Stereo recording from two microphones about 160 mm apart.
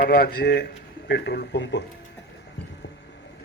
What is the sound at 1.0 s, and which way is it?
Speech, 90° left.